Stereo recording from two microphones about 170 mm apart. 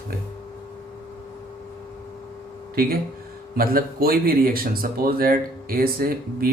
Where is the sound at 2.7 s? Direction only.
60° right (ahead or behind).